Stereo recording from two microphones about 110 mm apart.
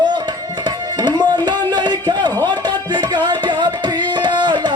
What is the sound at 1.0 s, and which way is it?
Music, 40° right (ahead or behind).